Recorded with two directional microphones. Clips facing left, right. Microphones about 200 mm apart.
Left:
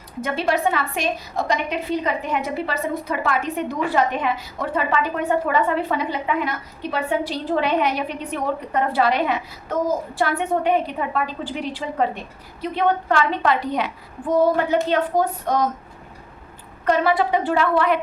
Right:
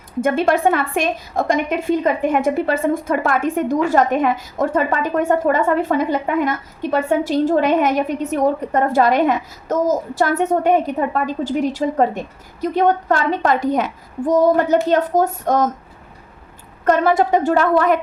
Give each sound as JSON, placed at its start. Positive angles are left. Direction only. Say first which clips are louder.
{"t": 0.2, "sound": "a woman's voice", "louder": "right 6 dB", "side_deg": -50}
{"t": 16.8, "sound": "a woman's voice", "louder": "right 4 dB", "side_deg": -45}